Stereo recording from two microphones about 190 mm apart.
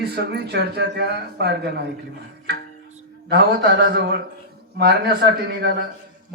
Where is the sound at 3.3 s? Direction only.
50° right (ahead or behind).